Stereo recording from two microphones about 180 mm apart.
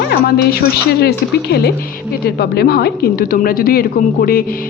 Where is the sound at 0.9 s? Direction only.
65° left (ahead or behind).